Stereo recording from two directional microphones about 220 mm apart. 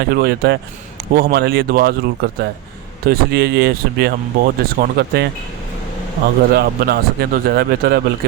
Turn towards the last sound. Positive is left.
turn(degrees=-45)  # may be behind; listen again after turning